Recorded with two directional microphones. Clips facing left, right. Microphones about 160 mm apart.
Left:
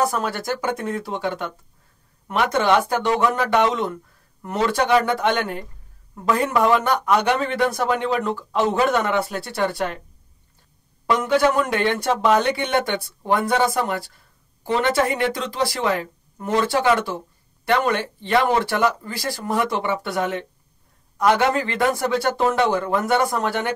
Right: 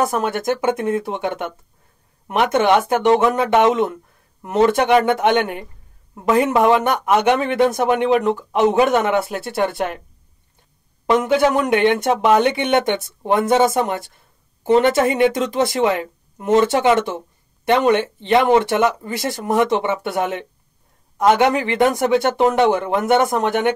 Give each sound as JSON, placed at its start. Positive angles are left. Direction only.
{"t": 0.0, "sound": "speech", "side_deg": -20}
{"t": 11.1, "sound": "speech", "side_deg": -20}